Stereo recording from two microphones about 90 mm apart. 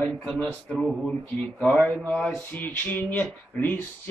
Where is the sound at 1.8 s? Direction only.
Centre (ahead or behind).